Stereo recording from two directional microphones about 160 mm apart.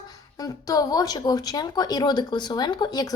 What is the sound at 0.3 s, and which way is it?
A woman's voice, 25° left (ahead or behind).